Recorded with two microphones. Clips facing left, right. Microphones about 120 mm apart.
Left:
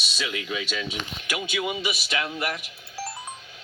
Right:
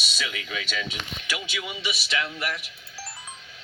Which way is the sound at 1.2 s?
45° left (ahead or behind).